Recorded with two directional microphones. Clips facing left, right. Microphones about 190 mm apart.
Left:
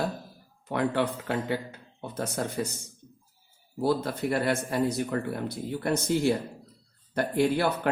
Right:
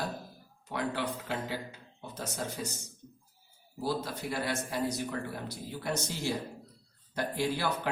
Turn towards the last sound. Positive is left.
turn(degrees=60)  # may be behind; listen again after turning